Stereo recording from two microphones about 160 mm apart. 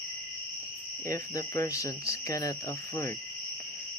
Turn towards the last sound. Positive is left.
turn(degrees=20)  # may be behind; listen again after turning